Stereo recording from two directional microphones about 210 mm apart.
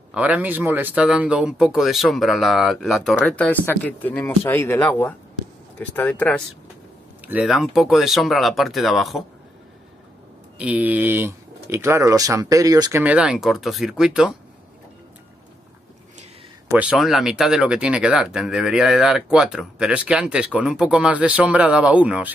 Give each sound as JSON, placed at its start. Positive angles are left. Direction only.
{"t": 0.1, "sound": "speech", "side_deg": -5}
{"t": 7.2, "sound": "speech", "side_deg": -5}
{"t": 10.6, "sound": "speech", "side_deg": -5}
{"t": 13.0, "sound": "speech", "side_deg": -5}
{"t": 16.6, "sound": "speech", "side_deg": -5}